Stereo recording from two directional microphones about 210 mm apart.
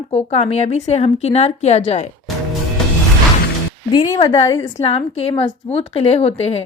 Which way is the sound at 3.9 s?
20° left (ahead or behind).